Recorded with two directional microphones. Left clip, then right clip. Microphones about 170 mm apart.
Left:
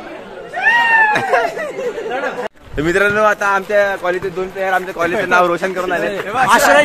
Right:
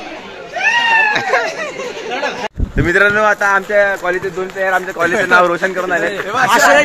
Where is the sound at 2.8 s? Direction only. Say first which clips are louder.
Right 2 dB; centre (ahead or behind).